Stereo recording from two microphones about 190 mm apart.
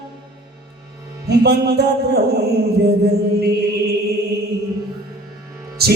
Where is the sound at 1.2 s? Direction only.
60° right (ahead or behind).